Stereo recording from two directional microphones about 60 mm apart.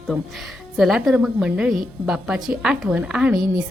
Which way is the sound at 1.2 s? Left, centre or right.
Centre.